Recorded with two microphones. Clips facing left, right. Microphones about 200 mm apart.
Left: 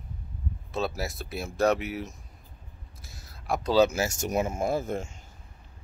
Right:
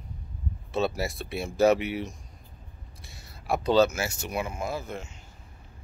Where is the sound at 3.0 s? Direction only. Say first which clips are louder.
Right 1 dB; centre (ahead or behind).